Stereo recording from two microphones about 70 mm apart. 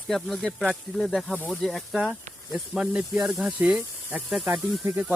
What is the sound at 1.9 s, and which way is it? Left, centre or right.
Speech, centre.